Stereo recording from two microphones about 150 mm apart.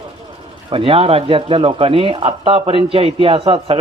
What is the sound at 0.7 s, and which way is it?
Speech, 35° right (ahead or behind).